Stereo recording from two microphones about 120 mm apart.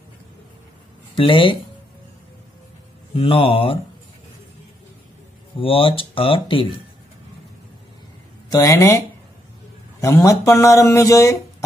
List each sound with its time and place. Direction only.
1.1 s speech: 45° left (ahead or behind)
3.2 s speech: 50° left (ahead or behind)
5.6 s speech: 50° left (ahead or behind)
8.5 s a man's voice: 25° left (ahead or behind)